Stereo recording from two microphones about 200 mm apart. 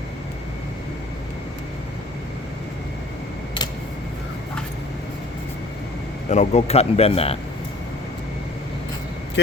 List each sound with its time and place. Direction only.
6.2 s speech: 35° left (ahead or behind)